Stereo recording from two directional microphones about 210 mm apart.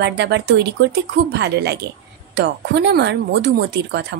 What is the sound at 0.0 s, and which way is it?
Speech, 55° right (ahead or behind).